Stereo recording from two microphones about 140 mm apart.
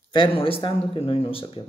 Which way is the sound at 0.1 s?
40° left (ahead or behind).